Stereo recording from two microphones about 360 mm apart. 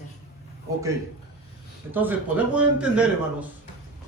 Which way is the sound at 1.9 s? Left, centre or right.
Centre.